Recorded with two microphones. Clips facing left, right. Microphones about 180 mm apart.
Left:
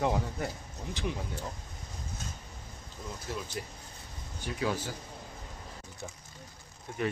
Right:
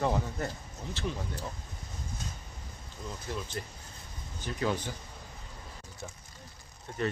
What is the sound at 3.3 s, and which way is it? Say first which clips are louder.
Speech: even; 10° left (ahead or behind).